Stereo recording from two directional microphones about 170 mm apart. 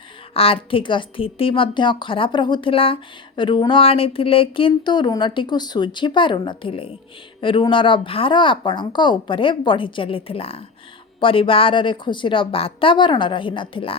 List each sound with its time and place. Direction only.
0.3 s a woman's voice: 35° left (ahead or behind)